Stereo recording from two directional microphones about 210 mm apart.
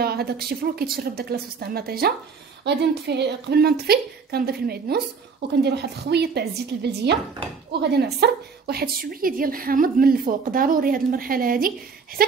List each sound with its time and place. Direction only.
0.0 s speech: 50° right (ahead or behind)